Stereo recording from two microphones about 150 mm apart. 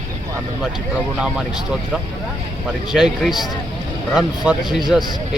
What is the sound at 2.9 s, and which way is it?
Speech, centre (ahead or behind).